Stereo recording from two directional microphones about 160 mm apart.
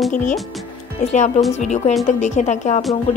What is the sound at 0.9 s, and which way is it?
Speech, 45° left (ahead or behind).